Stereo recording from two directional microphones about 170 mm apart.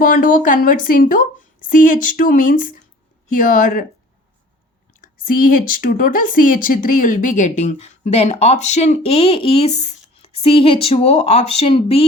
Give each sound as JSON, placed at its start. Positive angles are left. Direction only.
{"t": 0.0, "sound": "a woman's voice", "side_deg": 55}
{"t": 4.9, "sound": "speech", "side_deg": 55}